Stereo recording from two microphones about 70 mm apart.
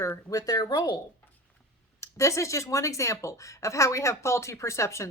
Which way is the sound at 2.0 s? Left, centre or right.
Left.